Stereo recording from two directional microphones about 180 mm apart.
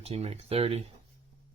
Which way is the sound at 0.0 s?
35° right (ahead or behind).